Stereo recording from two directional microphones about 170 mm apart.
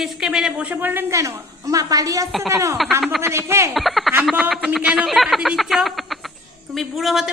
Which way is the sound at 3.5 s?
15° right (ahead or behind).